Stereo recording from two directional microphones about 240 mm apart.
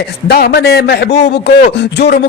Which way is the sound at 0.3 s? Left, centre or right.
Left.